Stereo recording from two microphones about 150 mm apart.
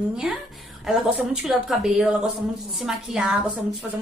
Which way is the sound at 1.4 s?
5° right (ahead or behind).